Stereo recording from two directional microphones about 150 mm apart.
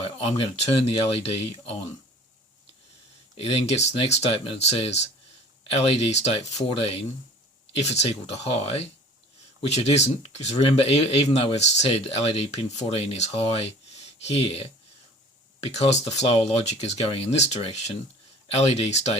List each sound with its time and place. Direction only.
0.3 s speech: 40° left (ahead or behind)
3.3 s speech: 45° left (ahead or behind)
15.7 s speech: 50° left (ahead or behind)